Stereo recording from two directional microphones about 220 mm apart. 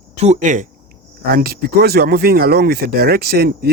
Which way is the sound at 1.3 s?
45° right (ahead or behind).